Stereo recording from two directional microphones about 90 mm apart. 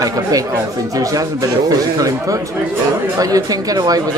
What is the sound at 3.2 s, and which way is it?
Speech, 40° right (ahead or behind).